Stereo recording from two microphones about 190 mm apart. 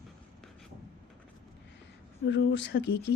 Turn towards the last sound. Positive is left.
turn(degrees=65)  # may be behind; listen again after turning